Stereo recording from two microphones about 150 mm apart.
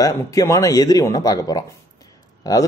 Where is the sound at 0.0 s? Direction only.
25° left (ahead or behind).